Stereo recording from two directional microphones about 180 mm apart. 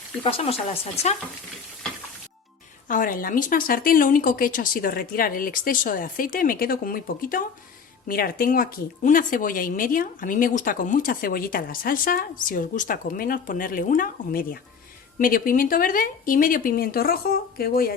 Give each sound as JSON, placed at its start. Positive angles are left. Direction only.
{"t": 0.2, "sound": "speech", "side_deg": 30}
{"t": 2.8, "sound": "speech", "side_deg": 50}